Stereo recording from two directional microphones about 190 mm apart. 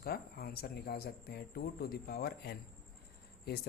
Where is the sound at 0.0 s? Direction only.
55° left (ahead or behind).